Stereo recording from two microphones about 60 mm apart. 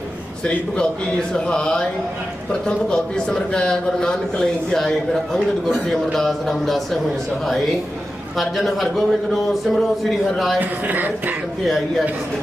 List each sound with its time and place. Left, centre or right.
1.3 s speech: centre
8.4 s a man's voice: centre
10.6 s speech: right